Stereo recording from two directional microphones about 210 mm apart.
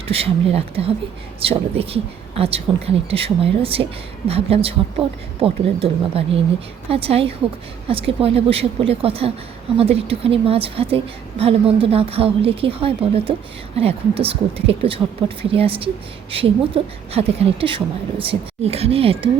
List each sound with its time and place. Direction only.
0.1 s a woman's voice: 25° right (ahead or behind)